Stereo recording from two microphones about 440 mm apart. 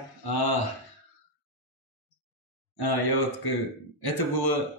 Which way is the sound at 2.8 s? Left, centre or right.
Left.